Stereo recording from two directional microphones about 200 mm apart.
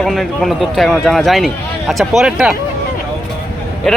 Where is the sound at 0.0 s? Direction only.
Centre (ahead or behind).